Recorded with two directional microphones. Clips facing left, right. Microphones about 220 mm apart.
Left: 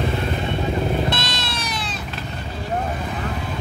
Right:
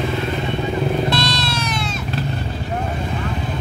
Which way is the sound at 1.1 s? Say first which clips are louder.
Right 6 dB; 20° left (ahead or behind).